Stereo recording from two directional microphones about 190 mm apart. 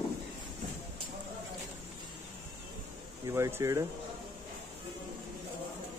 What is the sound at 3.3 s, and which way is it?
Speech, 15° right (ahead or behind).